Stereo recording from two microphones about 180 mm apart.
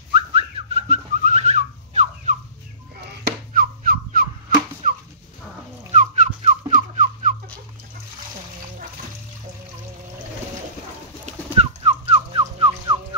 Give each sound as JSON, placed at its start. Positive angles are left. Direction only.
{"t": 0.1, "sound": "whistling", "side_deg": -30}
{"t": 3.5, "sound": "a sound", "side_deg": -50}
{"t": 11.2, "sound": "bird", "side_deg": -35}